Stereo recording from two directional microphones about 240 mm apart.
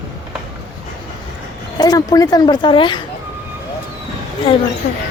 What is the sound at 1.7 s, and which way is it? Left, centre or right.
Speech, centre.